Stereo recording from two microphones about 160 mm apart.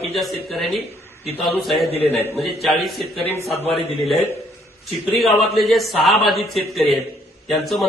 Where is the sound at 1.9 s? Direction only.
40° left (ahead or behind).